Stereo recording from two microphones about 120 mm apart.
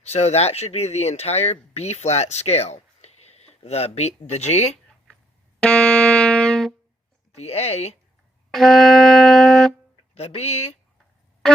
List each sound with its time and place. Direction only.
0.0 s speech: 65° left (ahead or behind)
5.5 s music: 10° left (ahead or behind)
7.3 s speech: 60° left (ahead or behind)
8.4 s wind instrument: centre (ahead or behind)
10.2 s speech: 65° left (ahead or behind)